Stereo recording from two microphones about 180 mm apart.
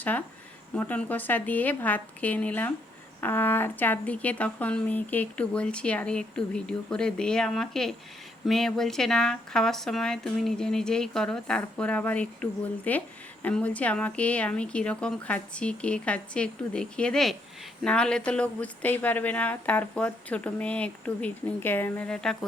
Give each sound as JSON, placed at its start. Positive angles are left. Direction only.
{"t": 0.8, "sound": "speech", "side_deg": 10}